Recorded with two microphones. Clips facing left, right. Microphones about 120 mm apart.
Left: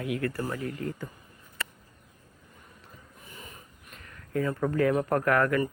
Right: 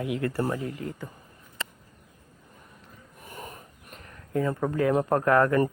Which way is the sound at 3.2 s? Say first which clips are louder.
Right 7 dB; 50° right (ahead or behind).